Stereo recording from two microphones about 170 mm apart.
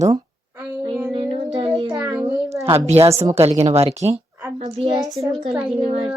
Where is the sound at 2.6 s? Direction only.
35° right (ahead or behind).